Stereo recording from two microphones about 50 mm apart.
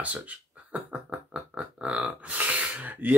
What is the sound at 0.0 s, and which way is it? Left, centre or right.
Speech, right.